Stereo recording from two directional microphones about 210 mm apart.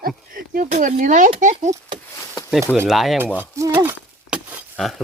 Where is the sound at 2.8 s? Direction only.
Centre (ahead or behind).